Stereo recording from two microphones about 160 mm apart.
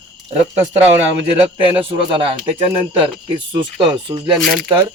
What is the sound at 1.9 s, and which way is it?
Speech, 35° right (ahead or behind).